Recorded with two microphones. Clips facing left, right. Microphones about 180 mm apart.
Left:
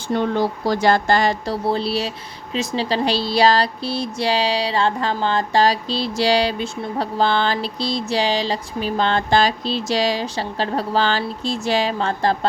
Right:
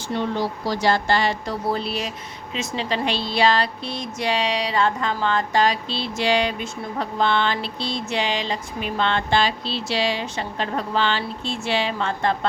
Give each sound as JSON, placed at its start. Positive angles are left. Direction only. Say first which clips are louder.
{"t": 0.1, "sound": "speech", "louder": "left 5 dB", "side_deg": 50}
{"t": 1.6, "sound": "speech", "louder": "left 4 dB", "side_deg": 30}